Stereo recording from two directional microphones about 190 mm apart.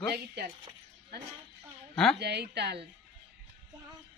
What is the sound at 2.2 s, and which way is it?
Speech, 60° right (ahead or behind).